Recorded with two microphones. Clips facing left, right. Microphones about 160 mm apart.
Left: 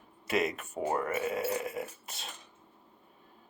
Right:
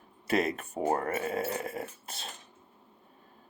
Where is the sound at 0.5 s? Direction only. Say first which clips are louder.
Right 2 dB; 35° right (ahead or behind).